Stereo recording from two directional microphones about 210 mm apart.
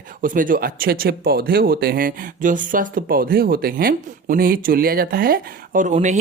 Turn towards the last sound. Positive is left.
turn(degrees=-35)  # may be behind; listen again after turning